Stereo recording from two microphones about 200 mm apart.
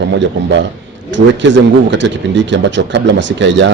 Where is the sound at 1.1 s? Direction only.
65° right (ahead or behind).